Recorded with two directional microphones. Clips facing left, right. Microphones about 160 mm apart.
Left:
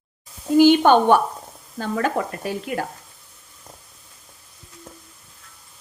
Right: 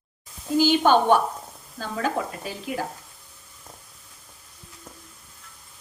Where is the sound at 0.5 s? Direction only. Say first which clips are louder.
Left 5 dB; 60° left (ahead or behind).